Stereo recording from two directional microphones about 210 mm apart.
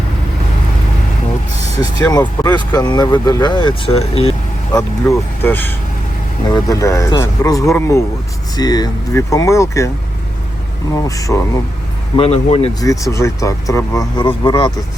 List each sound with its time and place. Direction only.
1.8 s speech: 20° left (ahead or behind)
4.7 s speech: 15° left (ahead or behind)
10.9 s speech: 15° left (ahead or behind)
12.1 s speech: 30° left (ahead or behind)
12.8 s speech: 15° left (ahead or behind)